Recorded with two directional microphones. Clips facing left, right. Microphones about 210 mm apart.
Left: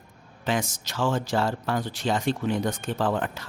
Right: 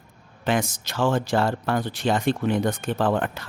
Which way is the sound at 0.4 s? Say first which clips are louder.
Right 3 dB; 60° right (ahead or behind).